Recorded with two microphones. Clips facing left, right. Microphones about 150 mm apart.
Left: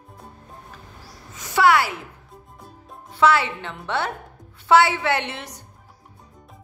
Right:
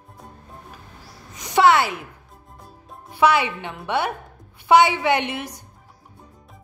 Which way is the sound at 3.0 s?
15° right (ahead or behind).